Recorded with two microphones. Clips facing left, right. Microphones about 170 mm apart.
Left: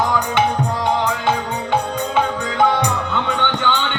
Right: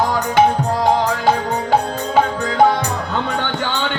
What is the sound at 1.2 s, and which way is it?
Music, 35° right (ahead or behind).